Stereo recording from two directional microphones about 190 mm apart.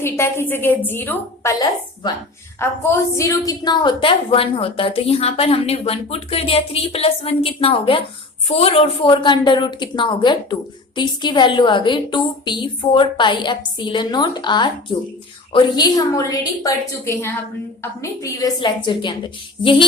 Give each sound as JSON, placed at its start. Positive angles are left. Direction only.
{"t": 0.0, "sound": "a woman's voice", "side_deg": 10}
{"t": 2.6, "sound": "a woman's voice", "side_deg": 15}